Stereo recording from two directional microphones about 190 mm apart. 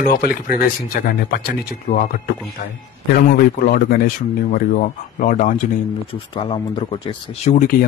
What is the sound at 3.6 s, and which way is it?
Speech, 50° left (ahead or behind).